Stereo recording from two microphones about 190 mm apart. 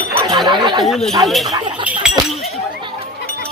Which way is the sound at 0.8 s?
Centre (ahead or behind).